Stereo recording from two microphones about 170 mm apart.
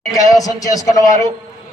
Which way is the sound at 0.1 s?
20° left (ahead or behind).